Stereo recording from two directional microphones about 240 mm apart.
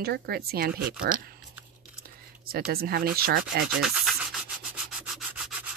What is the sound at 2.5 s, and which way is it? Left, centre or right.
Speech, right.